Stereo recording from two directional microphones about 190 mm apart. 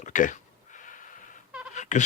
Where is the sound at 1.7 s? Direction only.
40° left (ahead or behind).